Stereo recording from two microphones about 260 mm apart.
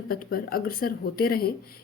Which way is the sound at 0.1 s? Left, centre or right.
Left.